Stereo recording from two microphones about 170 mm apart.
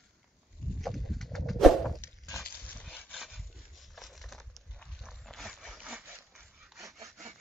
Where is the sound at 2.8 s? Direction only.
Centre (ahead or behind).